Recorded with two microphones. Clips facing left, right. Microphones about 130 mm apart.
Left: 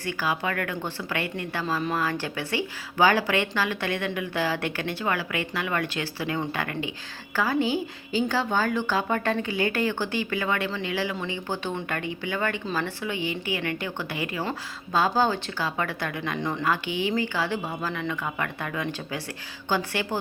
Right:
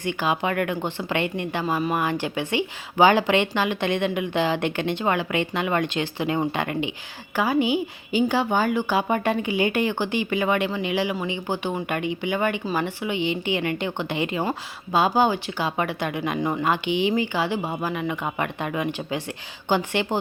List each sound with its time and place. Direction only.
0.0 s a woman's voice: 20° right (ahead or behind)